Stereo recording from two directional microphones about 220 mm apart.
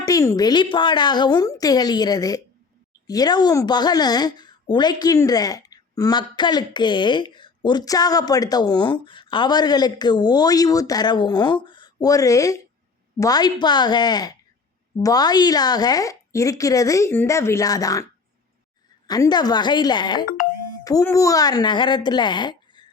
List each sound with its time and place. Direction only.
0.0 s a woman's voice: 15° left (ahead or behind)